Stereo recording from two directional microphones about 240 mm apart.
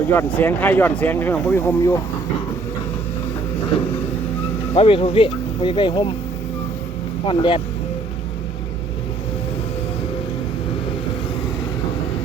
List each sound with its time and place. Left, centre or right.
0.1 s speech: centre
4.7 s speech: left
7.3 s speech: left